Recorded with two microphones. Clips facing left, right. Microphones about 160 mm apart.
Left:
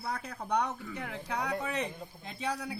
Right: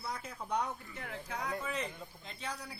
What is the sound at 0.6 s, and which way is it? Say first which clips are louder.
Speech: left 5 dB; 75° left (ahead or behind).